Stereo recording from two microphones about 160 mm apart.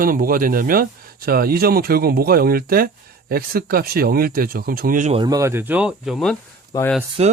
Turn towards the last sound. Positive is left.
turn(degrees=-40)  # may be behind; listen again after turning